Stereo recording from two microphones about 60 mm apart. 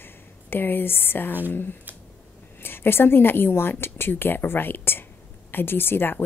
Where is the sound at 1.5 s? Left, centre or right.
Left.